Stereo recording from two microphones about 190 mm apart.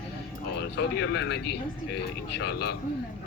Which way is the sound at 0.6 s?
60° left (ahead or behind).